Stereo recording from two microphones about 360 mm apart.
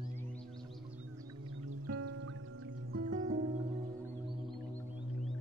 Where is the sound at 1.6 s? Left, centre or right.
Right.